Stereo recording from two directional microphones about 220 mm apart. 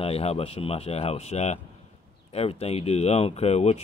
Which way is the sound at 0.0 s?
25° left (ahead or behind).